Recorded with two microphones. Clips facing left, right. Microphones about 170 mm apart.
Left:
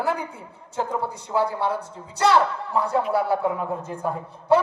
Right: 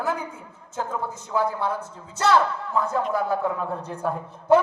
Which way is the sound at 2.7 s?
15° left (ahead or behind).